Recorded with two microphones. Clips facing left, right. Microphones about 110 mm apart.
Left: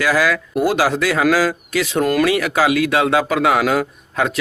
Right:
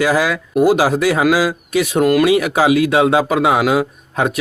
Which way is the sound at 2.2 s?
20° right (ahead or behind).